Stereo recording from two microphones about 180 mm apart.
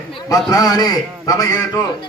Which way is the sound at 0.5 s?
20° left (ahead or behind).